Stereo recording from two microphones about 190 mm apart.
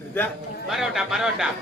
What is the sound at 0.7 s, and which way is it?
Speech, centre (ahead or behind).